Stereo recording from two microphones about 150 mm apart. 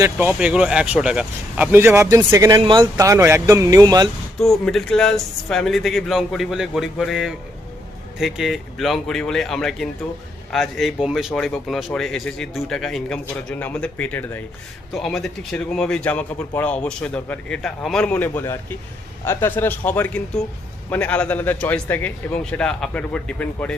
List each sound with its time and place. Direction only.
0.0 s speech: 10° right (ahead or behind); by 4.1 s 25° right (ahead or behind)
4.4 s a man's voice: centre (ahead or behind)